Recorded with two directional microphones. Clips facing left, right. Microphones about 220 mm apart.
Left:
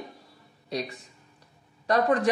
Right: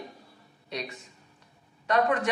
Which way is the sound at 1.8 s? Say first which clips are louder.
Left 2 dB; 35° left (ahead or behind).